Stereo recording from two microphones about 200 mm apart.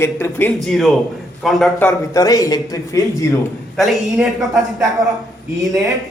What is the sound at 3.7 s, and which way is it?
A man's voice, centre (ahead or behind).